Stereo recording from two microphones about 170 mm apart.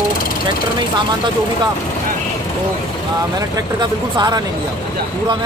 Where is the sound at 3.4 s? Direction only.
25° right (ahead or behind).